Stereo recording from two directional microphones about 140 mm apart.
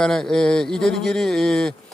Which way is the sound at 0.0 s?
5° left (ahead or behind).